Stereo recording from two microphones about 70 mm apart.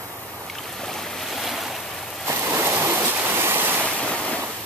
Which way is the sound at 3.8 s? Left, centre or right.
Centre.